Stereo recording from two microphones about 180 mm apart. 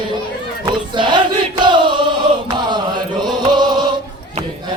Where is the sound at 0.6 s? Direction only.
25° right (ahead or behind).